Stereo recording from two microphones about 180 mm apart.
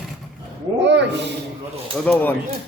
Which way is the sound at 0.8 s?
75° right (ahead or behind).